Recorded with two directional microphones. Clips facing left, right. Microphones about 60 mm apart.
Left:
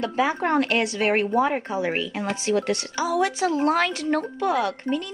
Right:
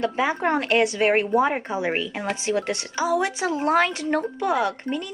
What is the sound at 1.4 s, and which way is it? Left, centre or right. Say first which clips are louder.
Speech: even; centre.